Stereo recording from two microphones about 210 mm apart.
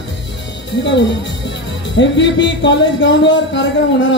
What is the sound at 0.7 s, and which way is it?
Speech, 60° left (ahead or behind).